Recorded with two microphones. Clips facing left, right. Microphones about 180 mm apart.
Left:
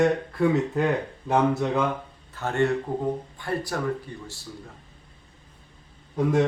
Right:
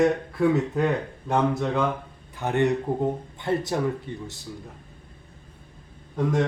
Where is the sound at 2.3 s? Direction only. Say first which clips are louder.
Right 1 dB; 15° right (ahead or behind).